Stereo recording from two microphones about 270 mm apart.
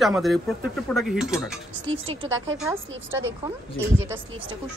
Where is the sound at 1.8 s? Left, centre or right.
Centre.